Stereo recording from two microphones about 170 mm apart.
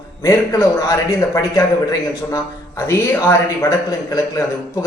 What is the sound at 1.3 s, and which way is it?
A man's voice, 20° left (ahead or behind).